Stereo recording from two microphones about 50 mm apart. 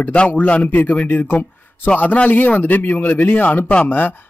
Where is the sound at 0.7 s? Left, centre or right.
Left.